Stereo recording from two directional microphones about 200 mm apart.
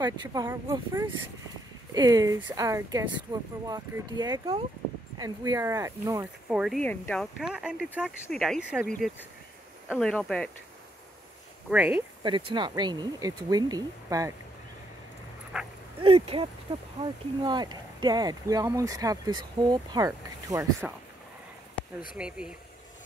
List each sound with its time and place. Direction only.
0.0 s speech: 20° right (ahead or behind)
6.5 s speech: 5° right (ahead or behind)
9.8 s speech: 5° left (ahead or behind)
11.7 s speech: 5° right (ahead or behind)
12.2 s speech: 25° right (ahead or behind)
15.5 s speech: 5° right (ahead or behind)
16.0 s speech: 30° right (ahead or behind)
22.1 s speech: 5° right (ahead or behind)